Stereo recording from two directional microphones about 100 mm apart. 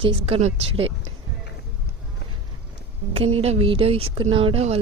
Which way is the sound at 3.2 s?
80° right.